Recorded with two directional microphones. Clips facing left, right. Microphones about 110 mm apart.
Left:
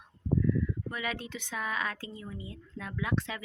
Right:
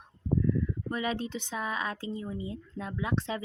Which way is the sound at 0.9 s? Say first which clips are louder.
Right 5 dB; 25° right (ahead or behind).